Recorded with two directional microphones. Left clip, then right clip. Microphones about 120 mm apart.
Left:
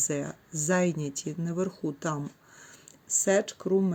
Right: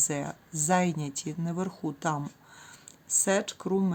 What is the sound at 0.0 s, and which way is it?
Speech, 15° right (ahead or behind).